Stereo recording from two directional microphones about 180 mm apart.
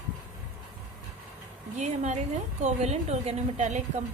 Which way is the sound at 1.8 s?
40° right (ahead or behind).